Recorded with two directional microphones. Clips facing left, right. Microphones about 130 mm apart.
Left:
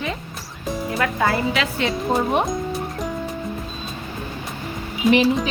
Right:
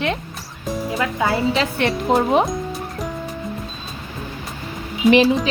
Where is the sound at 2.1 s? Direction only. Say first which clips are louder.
Right 4 dB; 90° right.